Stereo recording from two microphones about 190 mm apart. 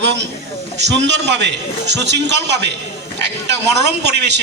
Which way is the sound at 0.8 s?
65° right (ahead or behind).